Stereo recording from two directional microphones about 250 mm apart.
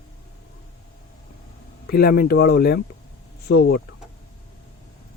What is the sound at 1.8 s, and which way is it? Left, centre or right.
Speech, left.